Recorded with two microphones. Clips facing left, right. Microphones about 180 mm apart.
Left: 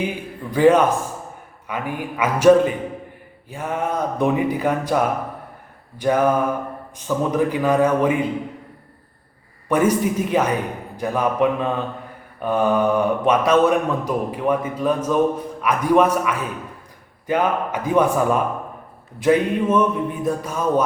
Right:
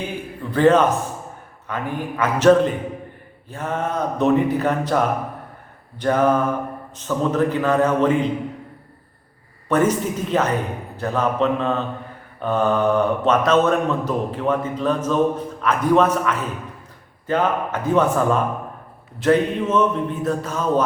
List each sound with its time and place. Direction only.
0.5 s a man's voice: 10° left (ahead or behind)
9.6 s a man's voice: 10° left (ahead or behind)